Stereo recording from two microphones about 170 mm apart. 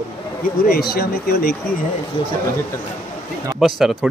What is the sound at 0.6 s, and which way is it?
Speech, 65° left (ahead or behind).